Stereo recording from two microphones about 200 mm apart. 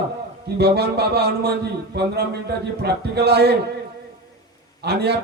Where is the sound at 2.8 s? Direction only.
55° right (ahead or behind).